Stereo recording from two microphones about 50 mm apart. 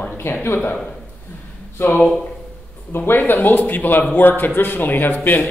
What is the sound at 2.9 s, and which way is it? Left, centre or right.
Speech, left.